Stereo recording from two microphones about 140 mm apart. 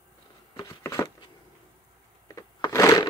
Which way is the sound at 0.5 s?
25° left (ahead or behind).